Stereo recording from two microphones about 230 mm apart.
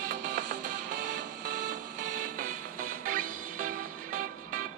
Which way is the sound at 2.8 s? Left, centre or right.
Right.